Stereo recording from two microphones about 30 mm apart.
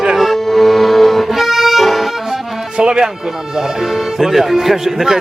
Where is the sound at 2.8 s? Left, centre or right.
Right.